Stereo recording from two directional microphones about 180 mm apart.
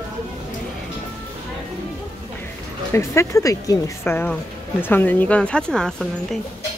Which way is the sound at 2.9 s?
15° left (ahead or behind).